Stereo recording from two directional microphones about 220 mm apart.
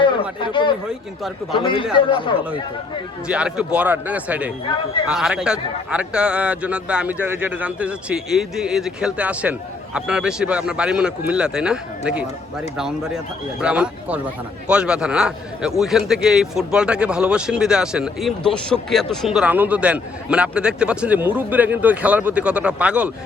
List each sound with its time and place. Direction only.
0.0 s a man's voice: 20° left (ahead or behind)
3.2 s a man's voice: 5° right (ahead or behind)